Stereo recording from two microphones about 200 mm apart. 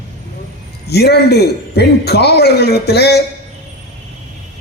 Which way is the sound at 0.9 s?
55° left (ahead or behind).